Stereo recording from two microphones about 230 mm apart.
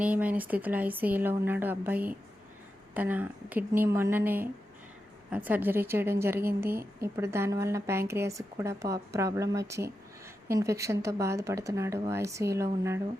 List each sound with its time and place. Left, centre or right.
0.0 s a woman's voice: centre